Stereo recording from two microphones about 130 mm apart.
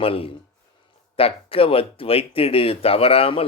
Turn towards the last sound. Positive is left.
turn(degrees=45)  # may be behind; listen again after turning